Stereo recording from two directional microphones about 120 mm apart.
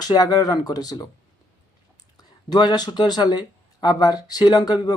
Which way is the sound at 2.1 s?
35° left (ahead or behind).